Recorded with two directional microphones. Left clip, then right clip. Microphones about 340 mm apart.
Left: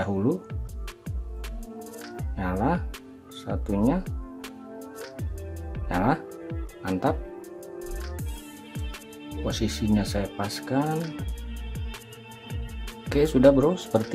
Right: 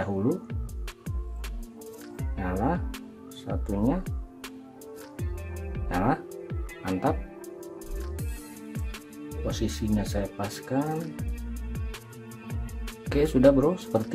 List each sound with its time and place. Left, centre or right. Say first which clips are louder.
0.0 s music: left 2 dB; centre
2.1 s music: left 2 dB; centre
3.4 s speech: left 3 dB; centre
5.9 s music: left 2 dB; centre
9.4 s speech: left 3 dB; centre
13.0 s speech: left 2 dB; centre